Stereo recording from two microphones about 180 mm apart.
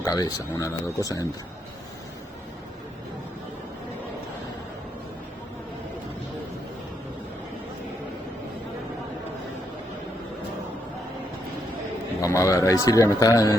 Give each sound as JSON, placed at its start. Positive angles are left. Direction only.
{"t": 0.0, "sound": "speech", "side_deg": 20}
{"t": 12.2, "sound": "speech", "side_deg": 15}